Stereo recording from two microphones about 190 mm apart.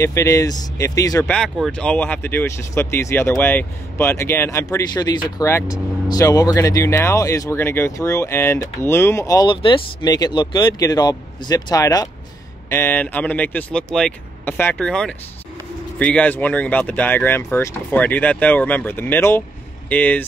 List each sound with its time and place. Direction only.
0.0 s speech: 15° left (ahead or behind)
1.2 s speech: 5° left (ahead or behind)